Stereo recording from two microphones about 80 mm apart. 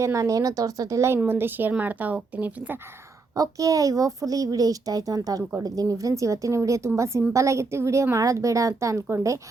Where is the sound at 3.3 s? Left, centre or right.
Right.